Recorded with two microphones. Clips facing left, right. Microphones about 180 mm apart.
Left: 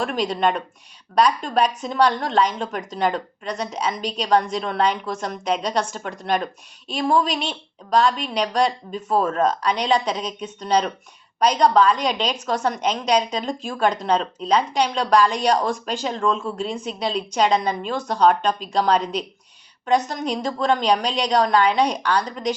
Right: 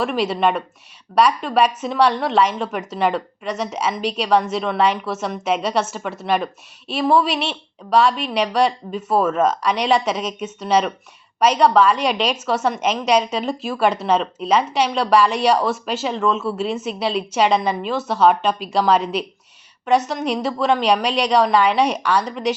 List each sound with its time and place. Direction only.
0.0 s a woman's voice: 5° right (ahead or behind)
20.4 s speech: 5° right (ahead or behind)